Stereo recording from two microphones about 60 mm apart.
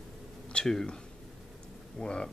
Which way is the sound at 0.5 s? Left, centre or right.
Centre.